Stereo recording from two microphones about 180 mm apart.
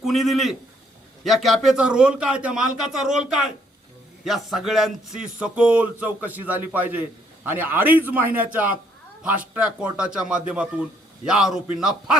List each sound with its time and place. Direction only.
0.0 s a man's voice: centre (ahead or behind)